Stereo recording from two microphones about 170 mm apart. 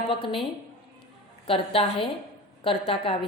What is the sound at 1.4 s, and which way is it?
A woman's voice, 30° left (ahead or behind).